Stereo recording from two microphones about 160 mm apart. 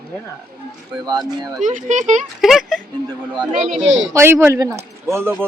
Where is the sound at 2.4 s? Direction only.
Centre (ahead or behind).